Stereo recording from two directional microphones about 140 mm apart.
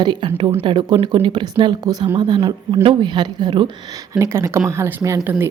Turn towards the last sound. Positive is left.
turn(degrees=-20)  # may be behind; listen again after turning